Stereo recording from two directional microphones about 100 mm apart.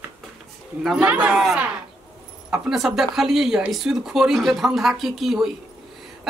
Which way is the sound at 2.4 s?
5° right (ahead or behind).